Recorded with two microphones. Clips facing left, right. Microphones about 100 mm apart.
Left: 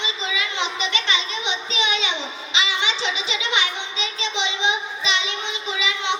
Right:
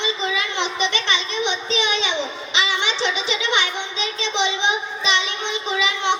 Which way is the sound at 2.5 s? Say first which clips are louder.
Even; 50° right (ahead or behind).